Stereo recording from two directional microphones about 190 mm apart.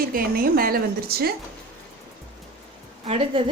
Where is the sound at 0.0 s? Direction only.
50° right (ahead or behind).